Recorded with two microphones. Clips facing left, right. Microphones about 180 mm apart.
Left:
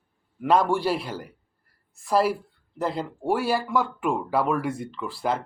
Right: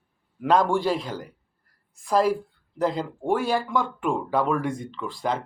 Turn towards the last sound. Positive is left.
turn(degrees=5)  # may be behind; listen again after turning